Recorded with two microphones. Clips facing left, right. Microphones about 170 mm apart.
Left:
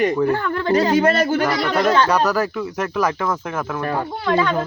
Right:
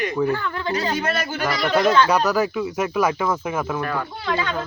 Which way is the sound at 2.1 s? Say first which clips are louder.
Left 1 dB; 5° right (ahead or behind).